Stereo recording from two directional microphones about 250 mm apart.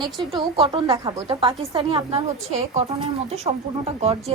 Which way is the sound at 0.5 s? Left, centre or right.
Right.